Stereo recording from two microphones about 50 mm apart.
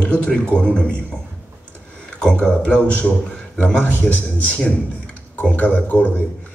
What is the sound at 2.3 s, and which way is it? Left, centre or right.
A man's voice, left.